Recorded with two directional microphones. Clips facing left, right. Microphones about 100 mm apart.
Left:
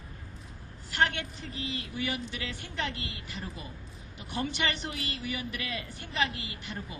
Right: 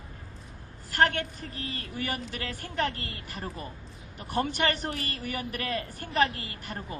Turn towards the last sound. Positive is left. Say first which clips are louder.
# right 2 dB
turn(degrees=-45)  # may be behind; listen again after turning